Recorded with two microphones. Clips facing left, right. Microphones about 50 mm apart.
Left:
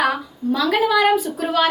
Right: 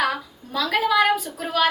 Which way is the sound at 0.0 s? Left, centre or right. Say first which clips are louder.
Left 4 dB; centre.